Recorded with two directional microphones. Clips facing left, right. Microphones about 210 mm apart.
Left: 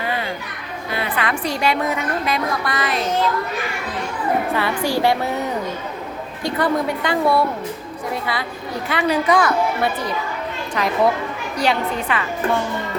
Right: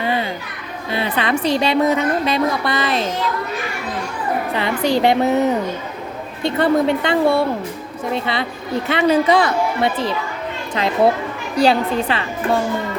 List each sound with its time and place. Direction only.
0.0 s children playing: 25° right (ahead or behind)
0.9 s a woman's voice: 25° right (ahead or behind)
4.5 s a woman's voice: 20° right (ahead or behind)
6.4 s a woman's voice: 25° right (ahead or behind)